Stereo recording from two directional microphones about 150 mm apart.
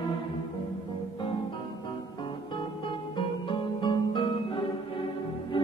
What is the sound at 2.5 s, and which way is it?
Music, 30° left (ahead or behind).